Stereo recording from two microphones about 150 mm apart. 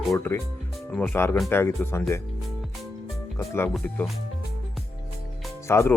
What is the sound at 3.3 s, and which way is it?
Speech, 15° left (ahead or behind).